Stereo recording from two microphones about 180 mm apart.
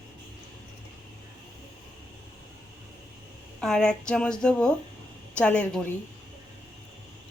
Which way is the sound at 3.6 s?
5° left (ahead or behind).